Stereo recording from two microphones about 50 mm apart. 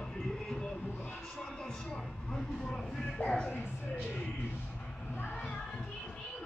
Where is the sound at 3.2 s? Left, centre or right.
Left.